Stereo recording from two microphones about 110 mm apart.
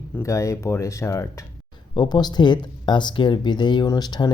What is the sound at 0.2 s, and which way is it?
Speech, 25° left (ahead or behind).